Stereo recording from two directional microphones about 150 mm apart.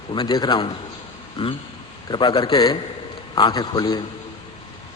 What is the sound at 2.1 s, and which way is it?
A man's voice, 30° left (ahead or behind).